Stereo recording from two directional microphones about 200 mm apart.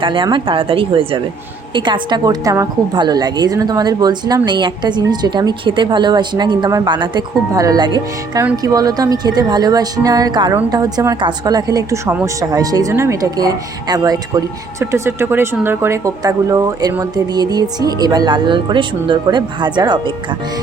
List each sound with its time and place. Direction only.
0.0 s speech: 25° right (ahead or behind)